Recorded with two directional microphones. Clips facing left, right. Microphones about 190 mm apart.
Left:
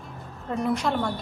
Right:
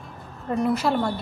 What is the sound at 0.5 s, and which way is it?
Speech, 5° right (ahead or behind).